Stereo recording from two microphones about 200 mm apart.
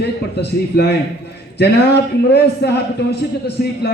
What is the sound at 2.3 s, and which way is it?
Speech, 55° left (ahead or behind).